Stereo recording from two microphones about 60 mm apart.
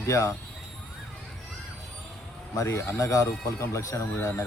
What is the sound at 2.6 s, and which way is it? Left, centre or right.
Speech, left.